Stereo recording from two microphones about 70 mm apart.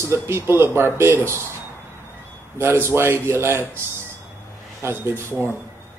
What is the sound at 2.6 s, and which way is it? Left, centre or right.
Speech, right.